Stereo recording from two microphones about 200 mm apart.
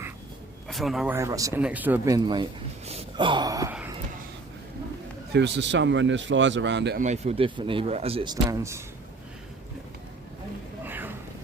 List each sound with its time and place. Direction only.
0.7 s speech: centre (ahead or behind); by 3.8 s 15° right (ahead or behind)
5.3 s speech: 60° right (ahead or behind)
7.0 s speech: 35° right (ahead or behind); by 8.8 s 15° right (ahead or behind)
10.8 s a sound: 10° right (ahead or behind)